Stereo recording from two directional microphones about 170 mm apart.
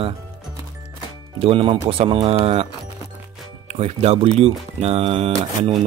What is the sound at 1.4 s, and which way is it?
Speech, 35° right (ahead or behind).